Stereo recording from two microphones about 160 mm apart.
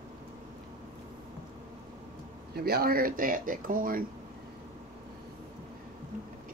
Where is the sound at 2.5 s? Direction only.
75° right (ahead or behind); by 4.0 s 60° right (ahead or behind).